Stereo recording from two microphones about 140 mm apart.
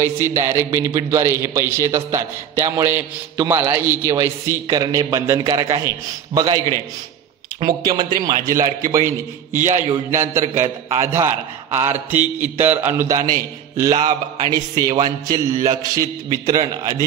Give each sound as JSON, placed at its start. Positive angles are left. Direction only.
{"t": 0.0, "sound": "a man's voice", "side_deg": -20}
{"t": 7.6, "sound": "a man's voice", "side_deg": -30}